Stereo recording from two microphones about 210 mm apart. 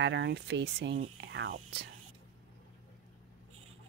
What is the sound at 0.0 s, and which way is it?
Speech, 55° right (ahead or behind).